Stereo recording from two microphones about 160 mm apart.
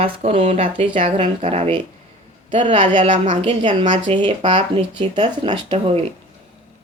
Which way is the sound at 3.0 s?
50° right (ahead or behind).